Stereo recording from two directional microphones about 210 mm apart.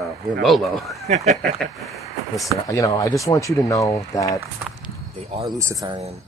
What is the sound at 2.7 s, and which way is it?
Speech, 15° left (ahead or behind).